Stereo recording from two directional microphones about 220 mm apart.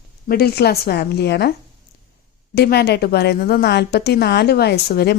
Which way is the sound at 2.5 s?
45° left (ahead or behind).